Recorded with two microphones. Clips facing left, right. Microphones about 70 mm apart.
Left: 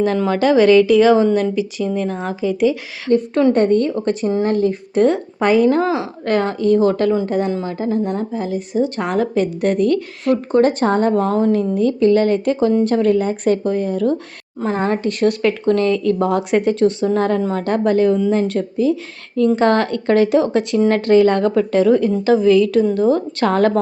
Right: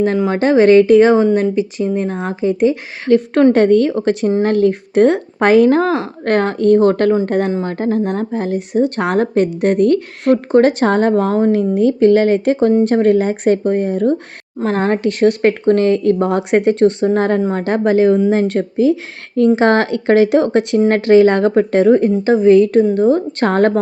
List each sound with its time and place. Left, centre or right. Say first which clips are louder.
0.3 s a woman's voice: right 2 dB; right
3.1 s speech: right 4 dB; right
5.6 s a woman's voice: right 3 dB; right
11.1 s a woman's voice: right 2 dB; right
11.9 s a woman's voice: right 2 dB; right
17.6 s a woman's voice: right 2 dB; right